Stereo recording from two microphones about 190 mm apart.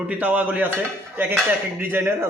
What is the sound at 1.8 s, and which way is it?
Speech, 10° right (ahead or behind).